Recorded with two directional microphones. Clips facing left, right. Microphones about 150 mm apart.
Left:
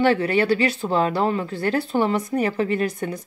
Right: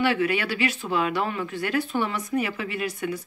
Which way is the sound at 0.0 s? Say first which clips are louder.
Left 5 dB; 40° left (ahead or behind).